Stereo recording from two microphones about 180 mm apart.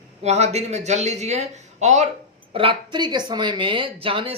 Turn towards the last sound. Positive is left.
turn(degrees=-30)  # may be behind; listen again after turning